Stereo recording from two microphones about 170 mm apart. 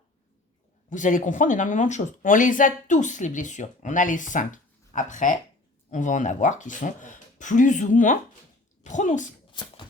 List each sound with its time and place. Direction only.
0.9 s speech: 50° left (ahead or behind)
9.5 s beatboxing: 25° left (ahead or behind)